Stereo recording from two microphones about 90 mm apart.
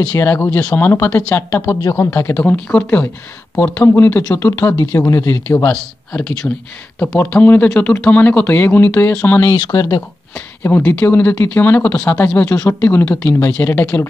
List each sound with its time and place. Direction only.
0.2 s speech: 20° left (ahead or behind)
2.3 s speech: 15° left (ahead or behind)
5.7 s speech: 10° left (ahead or behind)
7.2 s speech: 20° left (ahead or behind)
9.5 s speech: 40° left (ahead or behind)
10.3 s speech: 25° left (ahead or behind)